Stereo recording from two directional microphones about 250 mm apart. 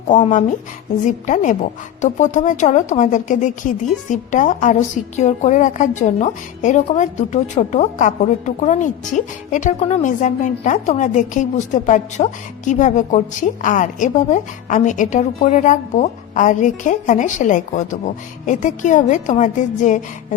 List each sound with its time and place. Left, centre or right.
0.1 s a woman's voice: left